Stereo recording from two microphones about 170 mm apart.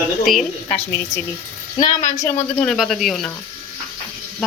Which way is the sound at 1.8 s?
25° left (ahead or behind).